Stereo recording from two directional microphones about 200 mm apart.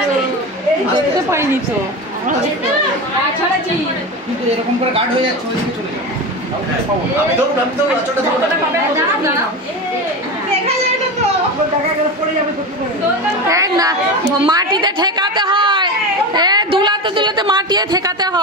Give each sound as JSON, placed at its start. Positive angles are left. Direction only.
{"t": 1.3, "sound": "speech", "side_deg": -15}
{"t": 13.5, "sound": "a woman's voice", "side_deg": -15}